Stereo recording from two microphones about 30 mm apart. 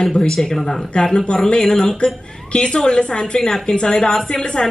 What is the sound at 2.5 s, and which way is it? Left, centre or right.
A woman's voice, left.